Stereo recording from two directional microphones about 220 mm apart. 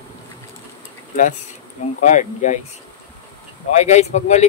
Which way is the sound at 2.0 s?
35° left (ahead or behind).